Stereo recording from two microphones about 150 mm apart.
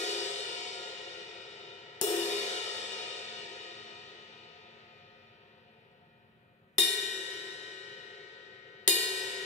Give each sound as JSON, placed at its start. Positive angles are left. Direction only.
{"t": 0.0, "sound": "music", "side_deg": 50}
{"t": 6.8, "sound": "cymbal", "side_deg": 50}
{"t": 8.8, "sound": "music", "side_deg": 50}